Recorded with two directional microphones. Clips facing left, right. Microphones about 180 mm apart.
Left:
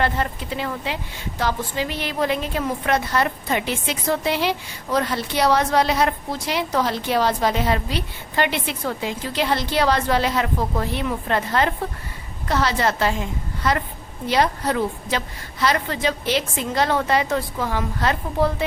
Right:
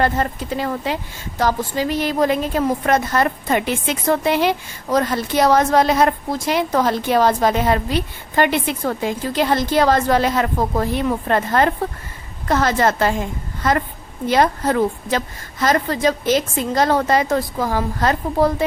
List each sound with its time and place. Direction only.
0.0 s a woman's voice: 40° right (ahead or behind)